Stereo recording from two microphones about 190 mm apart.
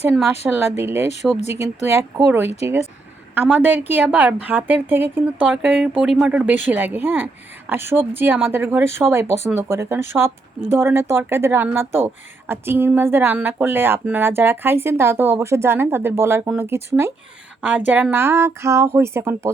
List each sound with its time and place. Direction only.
0.4 s a woman's voice: 5° right (ahead or behind)
1.4 s speech: 35° left (ahead or behind)
1.9 s a woman's voice: 15° right (ahead or behind)